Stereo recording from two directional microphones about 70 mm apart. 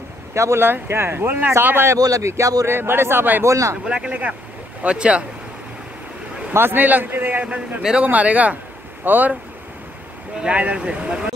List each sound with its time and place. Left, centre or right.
0.3 s speech: right
2.0 s speech: right
2.6 s speech: right
3.4 s speech: right
3.8 s speech: centre
6.5 s speech: right
7.4 s speech: centre
10.4 s speech: centre